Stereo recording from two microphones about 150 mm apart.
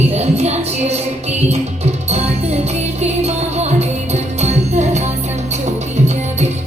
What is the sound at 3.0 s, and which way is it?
Music, 45° right (ahead or behind).